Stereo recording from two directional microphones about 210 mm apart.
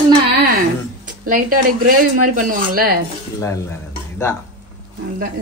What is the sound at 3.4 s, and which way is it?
Stir, 15° left (ahead or behind).